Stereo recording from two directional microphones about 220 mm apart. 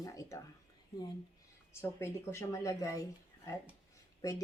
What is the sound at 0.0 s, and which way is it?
Speech, 15° left (ahead or behind).